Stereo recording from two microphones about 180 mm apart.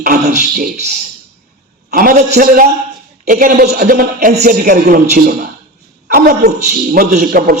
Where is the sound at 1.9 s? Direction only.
45° right (ahead or behind).